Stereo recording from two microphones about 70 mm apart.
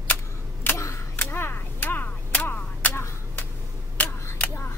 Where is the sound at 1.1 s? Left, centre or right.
Left.